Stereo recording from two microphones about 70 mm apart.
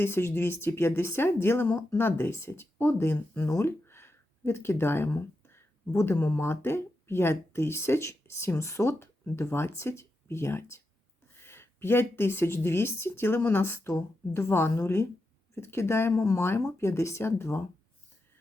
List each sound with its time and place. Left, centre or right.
0.0 s speech: left
3.5 s a sound: left
6.1 s speech: left